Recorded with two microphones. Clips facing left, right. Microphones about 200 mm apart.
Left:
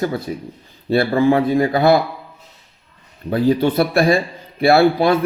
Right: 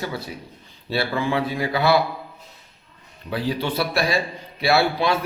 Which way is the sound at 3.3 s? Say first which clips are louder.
Left 9 dB; 50° left (ahead or behind).